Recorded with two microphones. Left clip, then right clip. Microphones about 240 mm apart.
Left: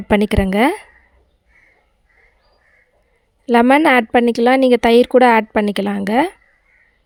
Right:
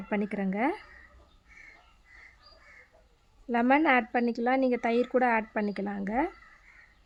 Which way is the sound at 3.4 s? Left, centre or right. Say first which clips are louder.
Left 13 dB; left.